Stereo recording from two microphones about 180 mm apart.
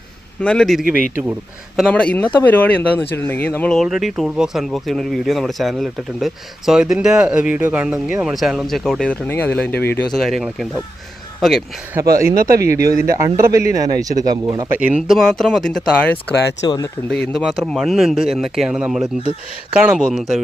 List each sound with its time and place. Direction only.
0.4 s speech: 5° left (ahead or behind)
0.9 s speech: 45° left (ahead or behind)
1.7 s speech: 5° left (ahead or behind)
9.7 s speech: 65° left (ahead or behind)
10.1 s speech: centre (ahead or behind)
12.0 s speech: 15° right (ahead or behind)
14.8 s speech: 5° right (ahead or behind)
16.6 s speech: 20° left (ahead or behind)
17.1 s speech: 5° left (ahead or behind)